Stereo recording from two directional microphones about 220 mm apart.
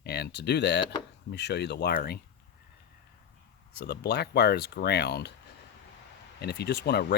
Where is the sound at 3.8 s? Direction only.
50° left (ahead or behind).